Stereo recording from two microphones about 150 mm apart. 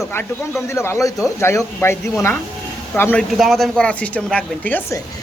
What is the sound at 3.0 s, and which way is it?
Speech, 15° left (ahead or behind).